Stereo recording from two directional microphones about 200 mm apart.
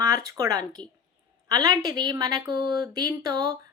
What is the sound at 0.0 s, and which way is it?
A woman's voice, 15° right (ahead or behind).